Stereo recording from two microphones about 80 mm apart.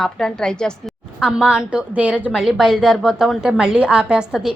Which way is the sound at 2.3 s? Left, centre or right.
Centre.